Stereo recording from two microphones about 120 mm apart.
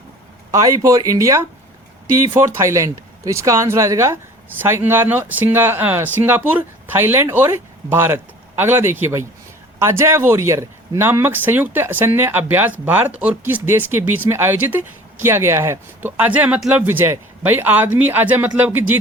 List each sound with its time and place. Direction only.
0.5 s speech: 25° right (ahead or behind)